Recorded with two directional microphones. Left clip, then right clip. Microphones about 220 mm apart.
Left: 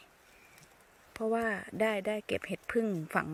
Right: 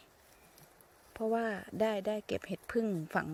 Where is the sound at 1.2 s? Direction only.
10° right (ahead or behind).